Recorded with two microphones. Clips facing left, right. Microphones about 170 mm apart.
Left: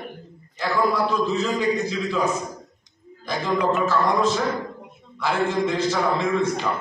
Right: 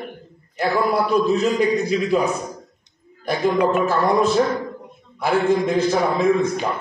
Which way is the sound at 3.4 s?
60° right (ahead or behind).